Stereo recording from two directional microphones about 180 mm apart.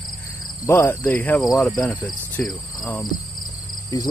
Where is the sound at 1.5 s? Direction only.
5° left (ahead or behind).